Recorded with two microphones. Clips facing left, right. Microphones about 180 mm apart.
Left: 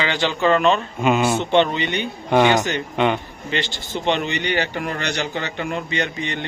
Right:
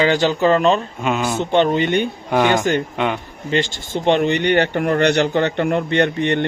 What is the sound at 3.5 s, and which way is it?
Speech, 45° right (ahead or behind).